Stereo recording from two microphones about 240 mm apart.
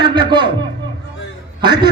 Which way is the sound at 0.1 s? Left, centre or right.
Centre.